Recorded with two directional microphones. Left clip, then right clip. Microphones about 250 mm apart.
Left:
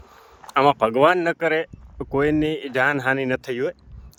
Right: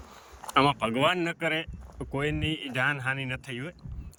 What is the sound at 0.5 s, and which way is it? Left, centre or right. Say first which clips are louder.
Speech: left 7 dB; left.